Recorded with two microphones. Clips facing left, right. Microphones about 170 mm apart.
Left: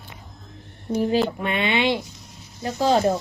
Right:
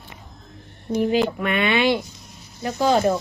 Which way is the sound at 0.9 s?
35° left (ahead or behind).